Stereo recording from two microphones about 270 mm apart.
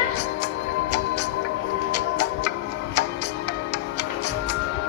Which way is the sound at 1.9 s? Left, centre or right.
Left.